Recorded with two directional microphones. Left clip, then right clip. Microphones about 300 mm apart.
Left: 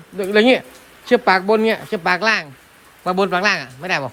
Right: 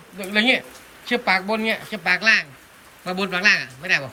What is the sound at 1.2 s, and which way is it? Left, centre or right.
Speech, centre.